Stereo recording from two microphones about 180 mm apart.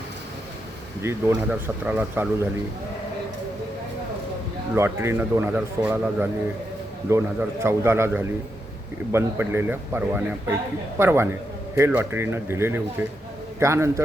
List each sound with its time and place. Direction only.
1.0 s a man's voice: 15° right (ahead or behind)
4.7 s a man's voice: 15° right (ahead or behind)